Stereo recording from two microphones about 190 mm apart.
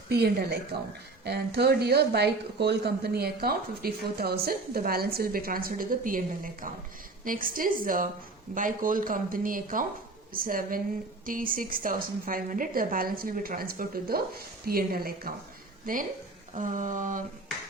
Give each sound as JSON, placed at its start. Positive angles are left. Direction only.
{"t": 0.1, "sound": "speech", "side_deg": -55}